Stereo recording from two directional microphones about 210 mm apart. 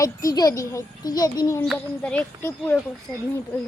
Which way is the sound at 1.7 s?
5° left (ahead or behind).